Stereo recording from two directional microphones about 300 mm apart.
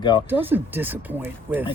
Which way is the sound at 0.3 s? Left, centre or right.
Centre.